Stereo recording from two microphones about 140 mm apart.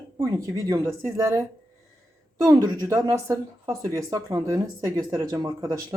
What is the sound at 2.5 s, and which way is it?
A woman's voice, 30° right (ahead or behind).